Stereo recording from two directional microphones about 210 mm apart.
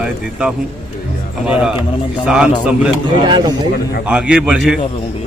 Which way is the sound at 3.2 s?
20° right (ahead or behind).